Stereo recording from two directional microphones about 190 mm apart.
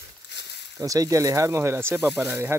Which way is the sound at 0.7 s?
15° right (ahead or behind).